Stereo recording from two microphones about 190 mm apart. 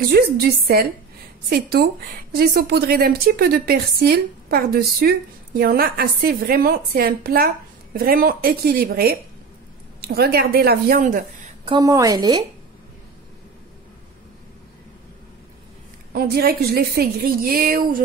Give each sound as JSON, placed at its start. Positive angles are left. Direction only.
{"t": 0.1, "sound": "a woman's voice", "side_deg": -55}
{"t": 11.6, "sound": "a woman's voice", "side_deg": -20}
{"t": 16.1, "sound": "a woman's voice", "side_deg": -50}